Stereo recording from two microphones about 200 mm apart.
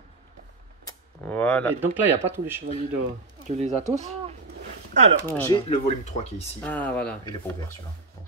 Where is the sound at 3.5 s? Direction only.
35° right (ahead or behind).